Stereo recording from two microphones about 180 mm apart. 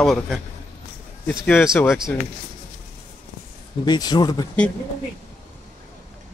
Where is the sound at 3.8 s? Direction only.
25° left (ahead or behind).